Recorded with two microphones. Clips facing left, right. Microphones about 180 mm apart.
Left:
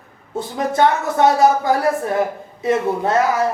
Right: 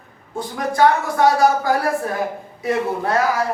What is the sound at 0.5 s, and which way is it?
A woman's voice, 25° left (ahead or behind).